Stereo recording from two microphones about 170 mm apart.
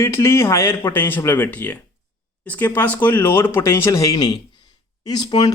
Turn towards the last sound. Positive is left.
turn(degrees=25)  # may be behind; listen again after turning